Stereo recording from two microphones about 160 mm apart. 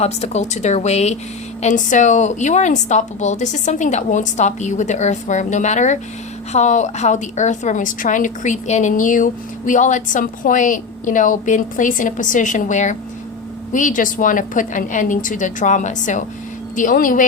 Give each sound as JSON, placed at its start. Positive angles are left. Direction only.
{"t": 0.0, "sound": "a woman's voice", "side_deg": 45}